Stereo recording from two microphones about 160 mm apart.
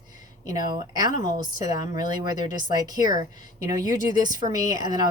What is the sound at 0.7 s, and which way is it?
Speech, 25° right (ahead or behind).